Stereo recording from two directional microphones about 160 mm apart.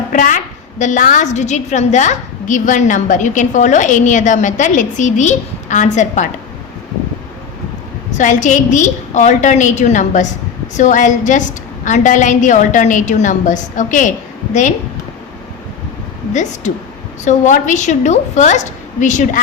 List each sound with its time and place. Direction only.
0.1 s a woman's voice: 55° left (ahead or behind)
8.2 s a woman's voice: 50° left (ahead or behind)
16.3 s a woman's voice: 50° left (ahead or behind)